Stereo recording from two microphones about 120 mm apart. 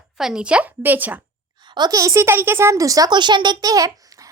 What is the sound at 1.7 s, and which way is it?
Speech, 35° right (ahead or behind).